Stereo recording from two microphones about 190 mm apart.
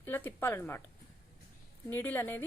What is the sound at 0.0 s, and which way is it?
Speech, 10° left (ahead or behind).